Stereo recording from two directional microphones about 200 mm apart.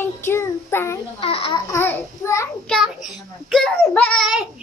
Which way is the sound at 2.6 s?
Centre (ahead or behind).